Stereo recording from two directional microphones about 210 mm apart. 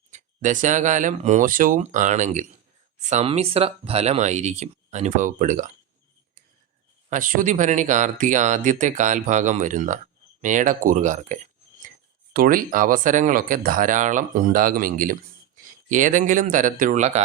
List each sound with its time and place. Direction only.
0.1 s speech: 35° right (ahead or behind)
7.1 s speech: 40° right (ahead or behind)